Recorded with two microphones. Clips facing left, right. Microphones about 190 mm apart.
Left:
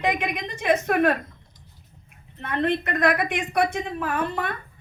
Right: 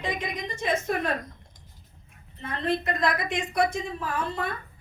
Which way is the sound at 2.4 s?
60° left (ahead or behind).